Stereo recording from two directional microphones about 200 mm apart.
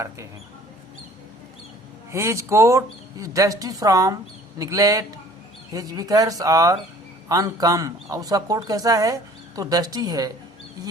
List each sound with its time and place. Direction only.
2.1 s speech: 15° right (ahead or behind)